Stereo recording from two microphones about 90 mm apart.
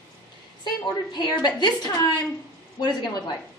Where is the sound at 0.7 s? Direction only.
50° left (ahead or behind).